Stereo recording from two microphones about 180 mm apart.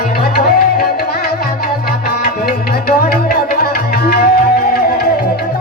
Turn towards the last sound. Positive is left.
turn(degrees=55)  # may be behind; listen again after turning